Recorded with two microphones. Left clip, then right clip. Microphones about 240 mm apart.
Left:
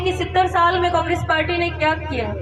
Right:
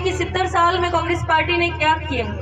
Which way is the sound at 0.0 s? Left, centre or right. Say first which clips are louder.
Left 3 dB; right.